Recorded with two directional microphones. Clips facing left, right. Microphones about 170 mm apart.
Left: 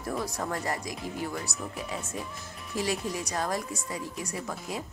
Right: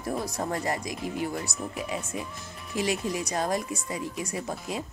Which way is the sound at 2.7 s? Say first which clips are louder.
Right 2 dB; 20° right (ahead or behind).